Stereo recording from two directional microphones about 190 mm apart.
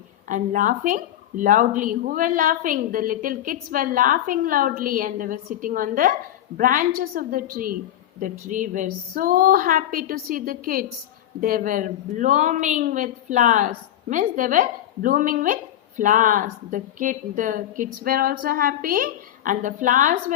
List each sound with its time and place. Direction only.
0.3 s a woman's voice: 40° right (ahead or behind)